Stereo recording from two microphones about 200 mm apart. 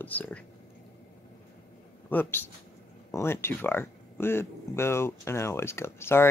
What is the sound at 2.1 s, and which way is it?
Speech, 10° left (ahead or behind).